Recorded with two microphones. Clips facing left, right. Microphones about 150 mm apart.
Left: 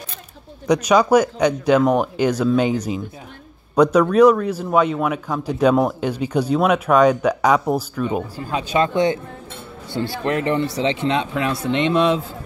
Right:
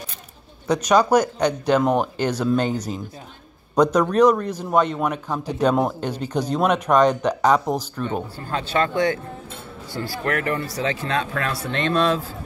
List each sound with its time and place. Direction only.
0.7 s a man's voice: 10° left (ahead or behind)